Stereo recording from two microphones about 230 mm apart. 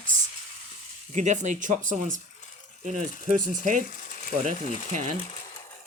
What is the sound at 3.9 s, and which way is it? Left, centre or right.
Ratchet, left.